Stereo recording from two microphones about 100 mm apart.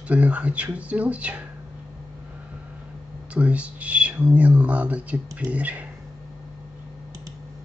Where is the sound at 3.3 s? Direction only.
15° right (ahead or behind).